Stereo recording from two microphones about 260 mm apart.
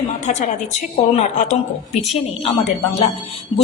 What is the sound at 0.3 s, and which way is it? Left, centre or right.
A woman's voice, left.